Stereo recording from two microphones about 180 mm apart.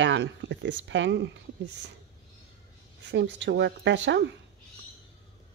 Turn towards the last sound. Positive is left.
turn(degrees=-85)